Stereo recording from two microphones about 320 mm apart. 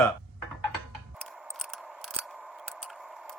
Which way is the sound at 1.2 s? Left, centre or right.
Centre.